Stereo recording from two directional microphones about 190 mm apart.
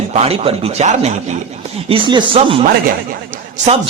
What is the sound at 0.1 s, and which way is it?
A man's voice, 30° right (ahead or behind).